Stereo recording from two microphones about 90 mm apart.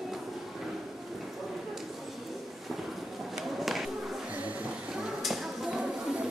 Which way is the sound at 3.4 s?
Centre (ahead or behind).